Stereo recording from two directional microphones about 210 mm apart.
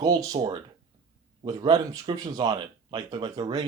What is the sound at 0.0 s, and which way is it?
Speech, 15° right (ahead or behind).